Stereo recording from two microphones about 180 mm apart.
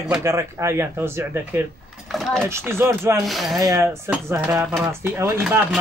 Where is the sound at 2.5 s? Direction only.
15° right (ahead or behind).